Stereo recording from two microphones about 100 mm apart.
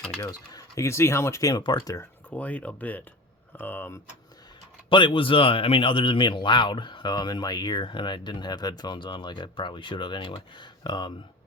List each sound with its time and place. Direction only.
0.2 s speech: 35° left (ahead or behind)
2.3 s speech: 15° left (ahead or behind)
4.9 s speech: 55° left (ahead or behind)